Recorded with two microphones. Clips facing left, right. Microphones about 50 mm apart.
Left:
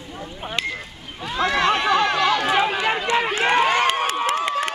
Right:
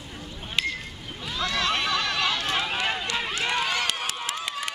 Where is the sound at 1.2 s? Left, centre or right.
Left.